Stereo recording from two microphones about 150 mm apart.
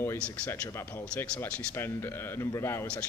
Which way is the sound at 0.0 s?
15° left (ahead or behind).